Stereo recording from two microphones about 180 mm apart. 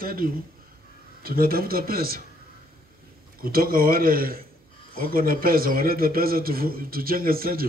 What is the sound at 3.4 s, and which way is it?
A man's voice, 55° right (ahead or behind).